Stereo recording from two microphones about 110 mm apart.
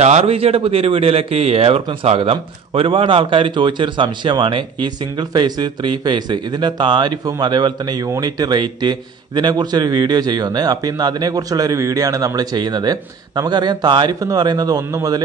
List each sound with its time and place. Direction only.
0.0 s a man's voice: 80° right; by 15.2 s 35° right (ahead or behind)